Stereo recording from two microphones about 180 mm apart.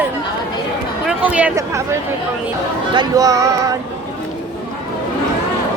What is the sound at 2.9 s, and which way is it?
Music, 20° right (ahead or behind).